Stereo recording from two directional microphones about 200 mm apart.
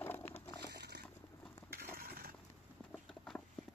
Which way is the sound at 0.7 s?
55° right (ahead or behind).